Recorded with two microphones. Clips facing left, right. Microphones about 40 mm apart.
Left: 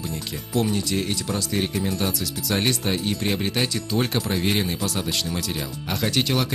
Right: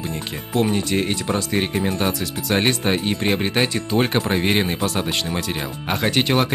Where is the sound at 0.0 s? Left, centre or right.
Right.